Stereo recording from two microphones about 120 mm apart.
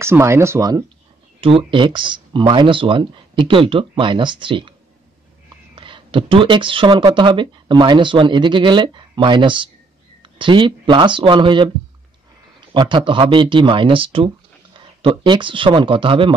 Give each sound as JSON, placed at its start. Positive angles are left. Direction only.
{"t": 0.0, "sound": "speech", "side_deg": -20}
{"t": 1.7, "sound": "speech", "side_deg": -40}
{"t": 5.8, "sound": "speech", "side_deg": -45}